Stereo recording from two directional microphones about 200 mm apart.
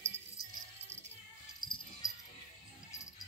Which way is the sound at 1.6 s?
20° left (ahead or behind).